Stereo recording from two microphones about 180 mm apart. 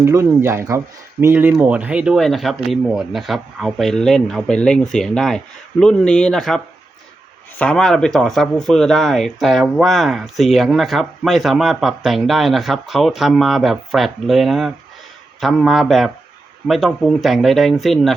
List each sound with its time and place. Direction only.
0.0 s speech: 15° right (ahead or behind); by 6.6 s 5° left (ahead or behind)
7.6 s speech: 5° left (ahead or behind)